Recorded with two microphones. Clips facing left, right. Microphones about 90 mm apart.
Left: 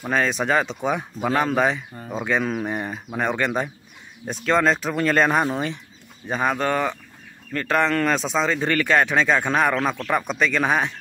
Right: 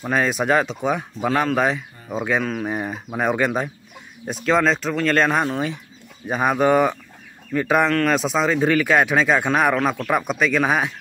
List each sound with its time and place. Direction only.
0.0 s speech: 5° right (ahead or behind)